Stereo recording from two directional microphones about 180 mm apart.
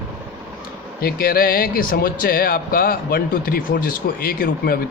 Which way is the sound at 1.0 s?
55° left (ahead or behind).